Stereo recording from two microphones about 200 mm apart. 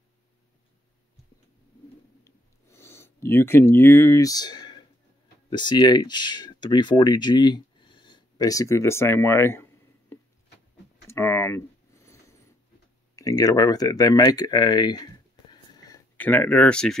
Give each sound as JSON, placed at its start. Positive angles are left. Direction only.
{"t": 2.2, "sound": "a sound", "side_deg": 10}
{"t": 5.5, "sound": "speech", "side_deg": 20}
{"t": 11.1, "sound": "a sound", "side_deg": 10}
{"t": 13.1, "sound": "speech", "side_deg": 15}
{"t": 15.5, "sound": "sniff", "side_deg": 20}
{"t": 16.2, "sound": "speech", "side_deg": 10}